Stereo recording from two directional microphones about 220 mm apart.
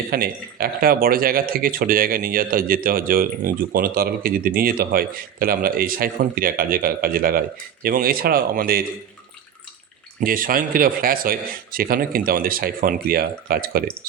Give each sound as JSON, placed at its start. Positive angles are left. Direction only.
{"t": 0.1, "sound": "speech", "side_deg": -40}
{"t": 10.2, "sound": "speech", "side_deg": -40}